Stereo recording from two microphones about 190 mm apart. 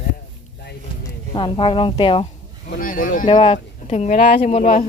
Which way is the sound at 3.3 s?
25° left (ahead or behind).